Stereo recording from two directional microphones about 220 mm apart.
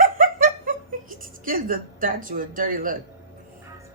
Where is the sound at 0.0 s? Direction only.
40° right (ahead or behind).